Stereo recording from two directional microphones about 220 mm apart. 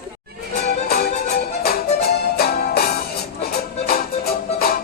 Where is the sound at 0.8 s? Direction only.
45° left (ahead or behind).